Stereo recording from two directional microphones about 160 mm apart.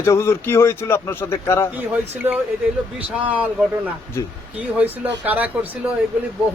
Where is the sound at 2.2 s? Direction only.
15° right (ahead or behind).